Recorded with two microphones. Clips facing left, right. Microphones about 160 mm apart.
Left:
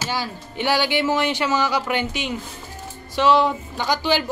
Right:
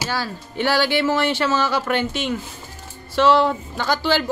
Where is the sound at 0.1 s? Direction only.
15° left (ahead or behind).